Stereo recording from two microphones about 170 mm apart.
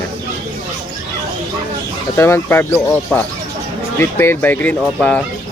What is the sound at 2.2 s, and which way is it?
Speech, 15° left (ahead or behind).